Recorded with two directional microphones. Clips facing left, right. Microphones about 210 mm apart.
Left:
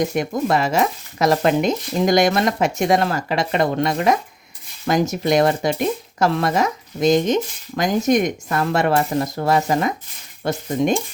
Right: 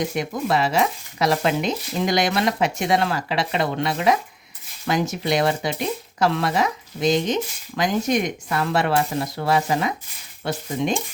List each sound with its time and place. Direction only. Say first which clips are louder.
0.0 s speech: left 4 dB; 45° left (ahead or behind)